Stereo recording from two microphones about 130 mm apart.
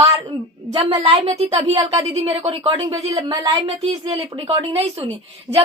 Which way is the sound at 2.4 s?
50° right (ahead or behind).